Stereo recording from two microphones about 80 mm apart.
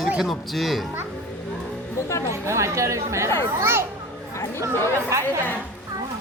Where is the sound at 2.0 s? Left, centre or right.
Left.